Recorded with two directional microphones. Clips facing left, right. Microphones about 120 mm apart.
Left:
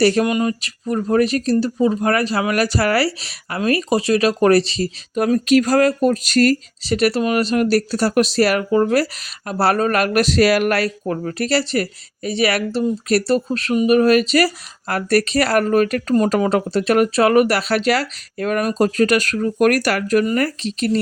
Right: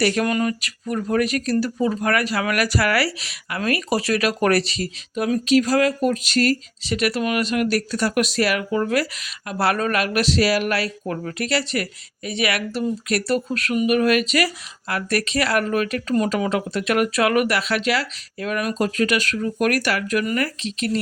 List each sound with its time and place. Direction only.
0.0 s speech: 35° left (ahead or behind)
5.1 s speech: 45° left (ahead or behind)
11.1 s speech: 35° left (ahead or behind)